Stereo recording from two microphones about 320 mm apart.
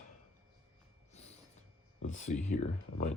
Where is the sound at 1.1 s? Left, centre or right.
Centre.